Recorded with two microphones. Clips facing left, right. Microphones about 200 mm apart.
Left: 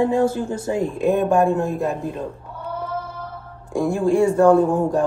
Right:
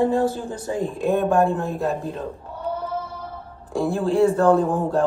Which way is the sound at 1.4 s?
15° left (ahead or behind).